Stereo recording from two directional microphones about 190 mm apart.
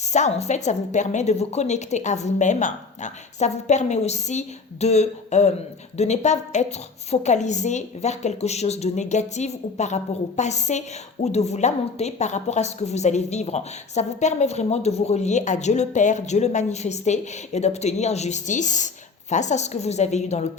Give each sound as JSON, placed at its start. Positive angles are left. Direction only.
{"t": 0.0, "sound": "a woman's voice", "side_deg": 35}